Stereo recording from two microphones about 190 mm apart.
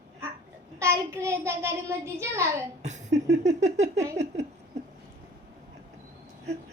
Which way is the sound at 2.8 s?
40° right (ahead or behind).